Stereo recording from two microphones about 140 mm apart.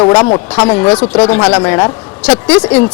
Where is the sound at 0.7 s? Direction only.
10° left (ahead or behind).